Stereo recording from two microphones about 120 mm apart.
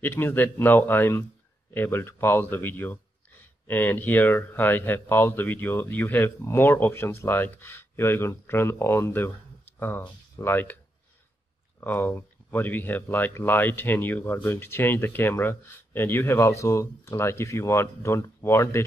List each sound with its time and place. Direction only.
0.0 s speech: 15° left (ahead or behind)
11.8 s speech: 15° left (ahead or behind)